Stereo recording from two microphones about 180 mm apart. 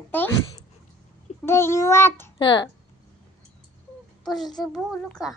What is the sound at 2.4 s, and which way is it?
Speech, 25° left (ahead or behind).